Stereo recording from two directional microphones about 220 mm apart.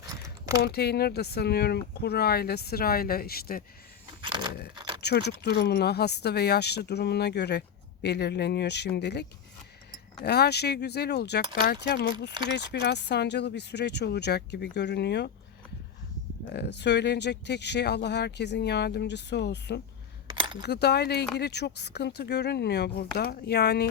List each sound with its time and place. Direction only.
0.0 s a sound: 15° right (ahead or behind)
0.6 s speech: 45° left (ahead or behind)
4.2 s a sound: 20° right (ahead or behind)
4.7 s keys jangling: 20° right (ahead or behind)
4.9 s speech: 50° left (ahead or behind)
10.2 s speech: 50° left (ahead or behind)
16.5 s speech: 50° left (ahead or behind)
20.2 s chink: 20° right (ahead or behind)
20.6 s speech: 50° left (ahead or behind)